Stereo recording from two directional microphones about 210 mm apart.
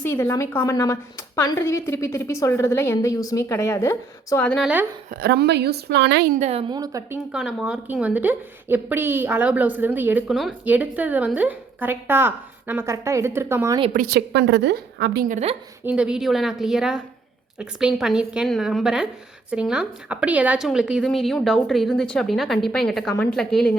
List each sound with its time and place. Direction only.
0.0 s a woman's voice: 10° left (ahead or behind); by 4.9 s 5° right (ahead or behind)
5.2 s a woman's voice: 50° right (ahead or behind); by 7.2 s 15° right (ahead or behind)
7.3 s a woman's voice: 5° right (ahead or behind)
13.9 s a woman's voice: 45° right (ahead or behind)
15.8 s a woman's voice: 5° right (ahead or behind)